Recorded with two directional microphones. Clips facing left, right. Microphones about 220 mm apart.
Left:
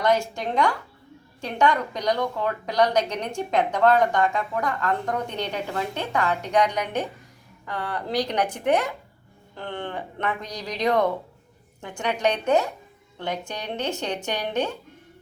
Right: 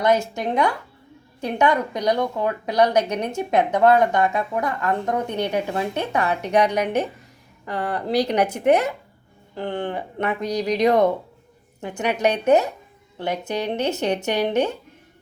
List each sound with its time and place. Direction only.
0.0 s a woman's voice: 20° right (ahead or behind)